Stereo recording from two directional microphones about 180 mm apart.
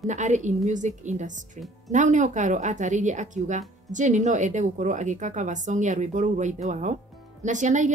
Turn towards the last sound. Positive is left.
turn(degrees=-45)  # may be behind; listen again after turning